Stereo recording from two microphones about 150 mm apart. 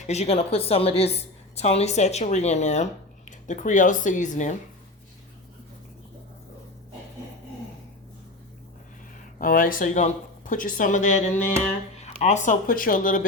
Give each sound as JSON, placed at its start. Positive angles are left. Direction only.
{"t": 0.1, "sound": "a woman's voice", "side_deg": 45}
{"t": 9.4, "sound": "speech", "side_deg": 70}
{"t": 12.2, "sound": "speech", "side_deg": 55}